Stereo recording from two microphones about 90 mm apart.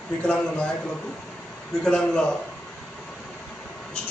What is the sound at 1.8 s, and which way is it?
Speech, 10° left (ahead or behind).